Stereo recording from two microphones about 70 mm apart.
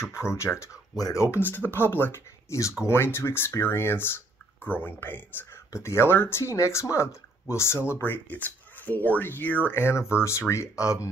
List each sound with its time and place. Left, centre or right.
0.0 s speech: left
0.9 s speech: left
1.4 s speech: left
5.7 s speech: left
6.5 s speech: left
7.9 s speech: left
9.8 s speech: left